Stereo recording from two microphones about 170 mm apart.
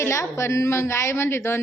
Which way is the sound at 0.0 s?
15° left (ahead or behind).